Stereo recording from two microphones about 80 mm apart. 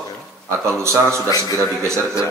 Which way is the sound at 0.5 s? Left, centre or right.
Right.